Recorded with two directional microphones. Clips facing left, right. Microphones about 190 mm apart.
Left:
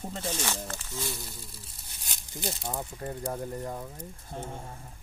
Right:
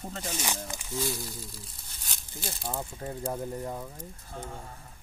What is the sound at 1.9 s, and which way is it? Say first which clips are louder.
Tearing: left 3 dB; 15° left (ahead or behind).